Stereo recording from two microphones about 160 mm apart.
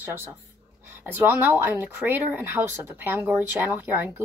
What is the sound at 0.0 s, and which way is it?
Speech, 15° right (ahead or behind).